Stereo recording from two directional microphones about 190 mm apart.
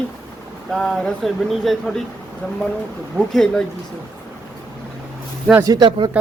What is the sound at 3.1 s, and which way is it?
Speech, 5° left (ahead or behind).